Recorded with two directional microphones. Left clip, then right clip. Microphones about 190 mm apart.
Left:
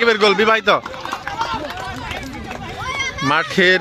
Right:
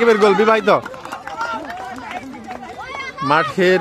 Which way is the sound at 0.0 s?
5° right (ahead or behind).